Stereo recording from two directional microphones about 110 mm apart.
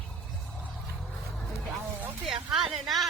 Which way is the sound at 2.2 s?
Centre (ahead or behind).